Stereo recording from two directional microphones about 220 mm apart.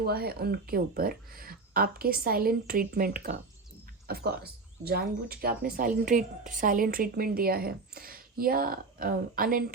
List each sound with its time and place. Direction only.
0.0 s speech: 45° right (ahead or behind)